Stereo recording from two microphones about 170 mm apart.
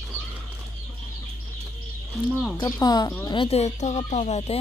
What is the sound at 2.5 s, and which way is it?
Speech, 20° left (ahead or behind).